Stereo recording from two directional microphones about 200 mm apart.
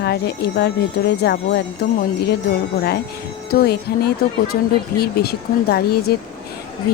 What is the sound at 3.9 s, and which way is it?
Speech, 50° left (ahead or behind).